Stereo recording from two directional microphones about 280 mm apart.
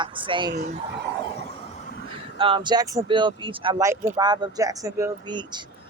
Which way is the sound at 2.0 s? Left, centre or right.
Centre.